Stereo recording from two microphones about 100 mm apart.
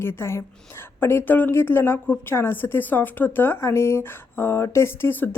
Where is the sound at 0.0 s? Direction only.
25° left (ahead or behind).